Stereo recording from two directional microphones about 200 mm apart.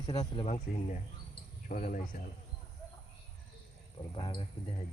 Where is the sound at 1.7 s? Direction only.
40° left (ahead or behind).